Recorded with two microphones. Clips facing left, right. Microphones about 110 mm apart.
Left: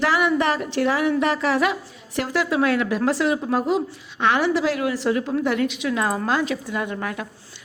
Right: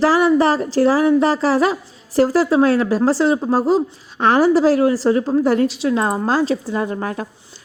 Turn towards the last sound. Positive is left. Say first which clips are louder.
# right 5 dB
turn(degrees=-35)  # may be behind; listen again after turning